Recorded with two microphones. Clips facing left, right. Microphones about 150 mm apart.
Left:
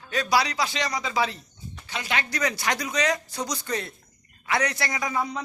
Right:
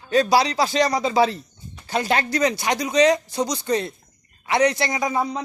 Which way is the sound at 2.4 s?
25° right (ahead or behind).